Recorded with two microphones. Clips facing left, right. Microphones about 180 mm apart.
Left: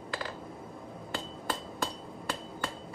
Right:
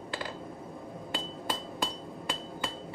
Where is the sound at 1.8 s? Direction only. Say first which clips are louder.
Right 1 dB; 15° right (ahead or behind).